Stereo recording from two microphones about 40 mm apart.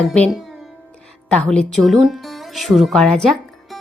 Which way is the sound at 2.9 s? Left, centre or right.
Centre.